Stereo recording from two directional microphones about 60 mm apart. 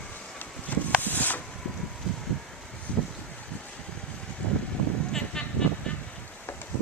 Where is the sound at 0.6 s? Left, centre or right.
Left.